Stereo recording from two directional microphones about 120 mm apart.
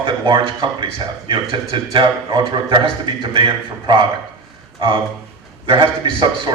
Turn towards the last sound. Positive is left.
turn(degrees=-40)  # may be behind; listen again after turning